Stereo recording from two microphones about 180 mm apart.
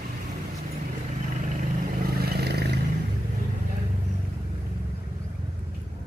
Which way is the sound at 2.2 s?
60° right (ahead or behind).